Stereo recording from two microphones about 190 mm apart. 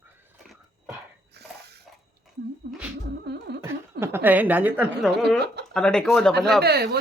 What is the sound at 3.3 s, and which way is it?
Music, 60° right (ahead or behind).